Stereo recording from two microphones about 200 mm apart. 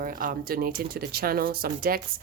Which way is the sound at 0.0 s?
45° right (ahead or behind).